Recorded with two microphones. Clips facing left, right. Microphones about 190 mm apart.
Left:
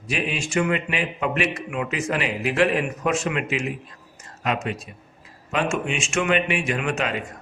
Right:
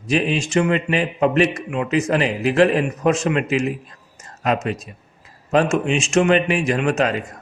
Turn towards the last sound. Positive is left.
turn(degrees=-40)  # may be behind; listen again after turning